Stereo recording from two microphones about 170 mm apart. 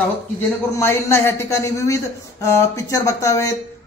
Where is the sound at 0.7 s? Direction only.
15° left (ahead or behind).